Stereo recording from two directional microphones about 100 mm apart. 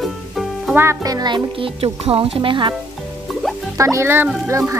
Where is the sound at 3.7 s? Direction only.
30° right (ahead or behind).